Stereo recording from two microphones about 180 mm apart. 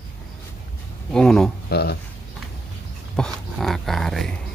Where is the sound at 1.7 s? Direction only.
60° left (ahead or behind).